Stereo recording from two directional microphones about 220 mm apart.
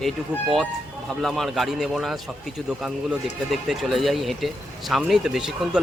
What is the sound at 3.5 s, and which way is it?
Speech, centre (ahead or behind).